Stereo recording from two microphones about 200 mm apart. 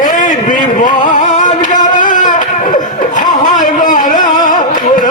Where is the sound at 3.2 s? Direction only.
40° left (ahead or behind).